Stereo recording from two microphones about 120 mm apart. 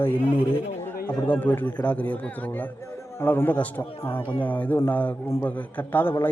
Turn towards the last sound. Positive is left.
turn(degrees=15)  # may be behind; listen again after turning